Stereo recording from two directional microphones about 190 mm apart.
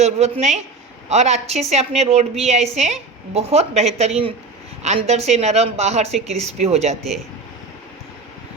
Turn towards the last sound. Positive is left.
turn(degrees=-35)  # may be behind; listen again after turning